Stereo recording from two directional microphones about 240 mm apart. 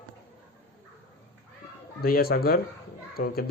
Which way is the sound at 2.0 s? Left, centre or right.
Left.